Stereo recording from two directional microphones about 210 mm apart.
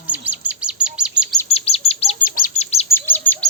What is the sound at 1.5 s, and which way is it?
Chirp, 30° left (ahead or behind).